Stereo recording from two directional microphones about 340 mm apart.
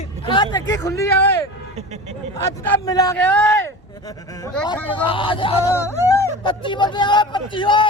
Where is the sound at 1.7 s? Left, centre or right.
Centre.